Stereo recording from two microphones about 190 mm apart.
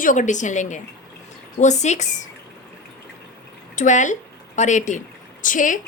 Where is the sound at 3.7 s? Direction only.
40° left (ahead or behind).